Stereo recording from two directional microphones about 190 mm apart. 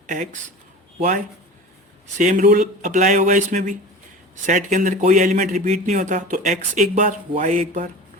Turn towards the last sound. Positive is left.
turn(degrees=-40)  # may be behind; listen again after turning